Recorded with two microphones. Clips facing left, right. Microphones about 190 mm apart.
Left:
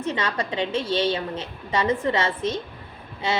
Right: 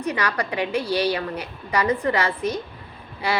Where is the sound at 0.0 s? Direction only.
25° left (ahead or behind).